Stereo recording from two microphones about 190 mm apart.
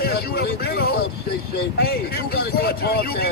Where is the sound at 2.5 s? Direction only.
55° left (ahead or behind).